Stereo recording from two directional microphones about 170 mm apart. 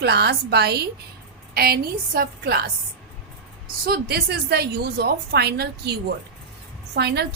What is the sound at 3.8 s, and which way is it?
A woman's voice, 65° right (ahead or behind).